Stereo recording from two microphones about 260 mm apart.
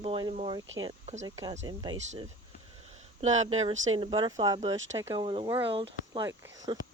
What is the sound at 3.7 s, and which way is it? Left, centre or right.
Speech, right.